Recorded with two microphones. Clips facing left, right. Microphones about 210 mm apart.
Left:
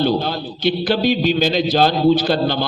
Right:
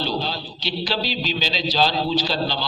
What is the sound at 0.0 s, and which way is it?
A man's voice, 55° left (ahead or behind).